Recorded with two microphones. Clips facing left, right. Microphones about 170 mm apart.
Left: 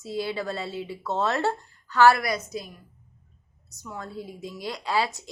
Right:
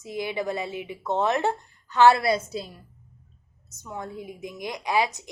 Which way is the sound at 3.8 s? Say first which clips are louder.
Right 1 dB; 20° right (ahead or behind).